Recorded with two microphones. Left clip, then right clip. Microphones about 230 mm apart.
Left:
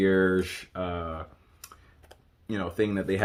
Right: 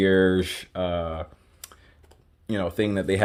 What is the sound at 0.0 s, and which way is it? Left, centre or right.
Speech, right.